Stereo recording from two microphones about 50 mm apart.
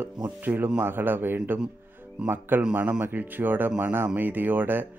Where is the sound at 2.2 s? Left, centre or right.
Centre.